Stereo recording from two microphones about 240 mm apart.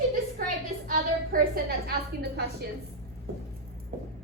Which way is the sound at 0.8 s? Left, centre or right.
Right.